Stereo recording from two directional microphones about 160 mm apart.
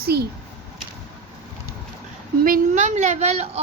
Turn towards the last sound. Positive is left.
turn(degrees=-45)  # may be behind; listen again after turning